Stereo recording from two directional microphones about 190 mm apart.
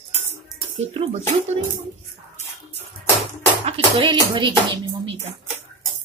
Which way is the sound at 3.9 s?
25° right (ahead or behind).